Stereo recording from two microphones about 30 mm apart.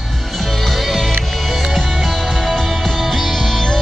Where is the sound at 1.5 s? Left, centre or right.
Centre.